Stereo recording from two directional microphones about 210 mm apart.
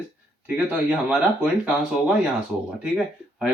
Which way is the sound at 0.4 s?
5° right (ahead or behind).